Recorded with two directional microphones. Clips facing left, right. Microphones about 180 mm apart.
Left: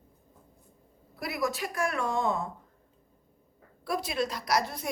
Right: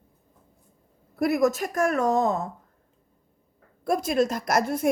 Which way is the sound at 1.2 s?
50° right (ahead or behind).